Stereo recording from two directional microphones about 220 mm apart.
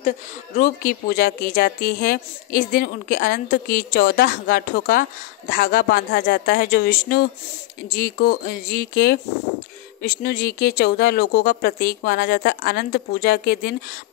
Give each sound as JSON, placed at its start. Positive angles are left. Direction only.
{"t": 0.6, "sound": "speech", "side_deg": 40}